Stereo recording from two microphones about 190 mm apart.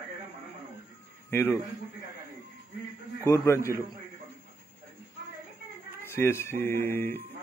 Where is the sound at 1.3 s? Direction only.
10° left (ahead or behind).